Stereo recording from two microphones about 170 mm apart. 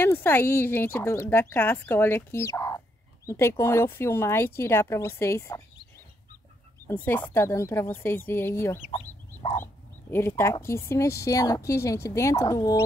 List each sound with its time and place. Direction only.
0.0 s a woman's voice: 10° left (ahead or behind)
6.9 s a woman's voice: 15° left (ahead or behind)
8.9 s chicken: 35° left (ahead or behind)
10.1 s a woman's voice: 15° left (ahead or behind)